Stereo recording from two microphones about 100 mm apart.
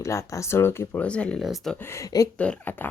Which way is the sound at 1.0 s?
10° left (ahead or behind).